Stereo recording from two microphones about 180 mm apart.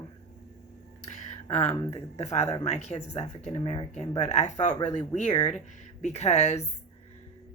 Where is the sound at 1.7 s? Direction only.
20° left (ahead or behind).